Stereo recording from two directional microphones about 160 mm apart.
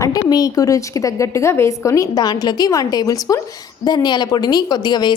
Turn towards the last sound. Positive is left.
turn(degrees=25)  # may be behind; listen again after turning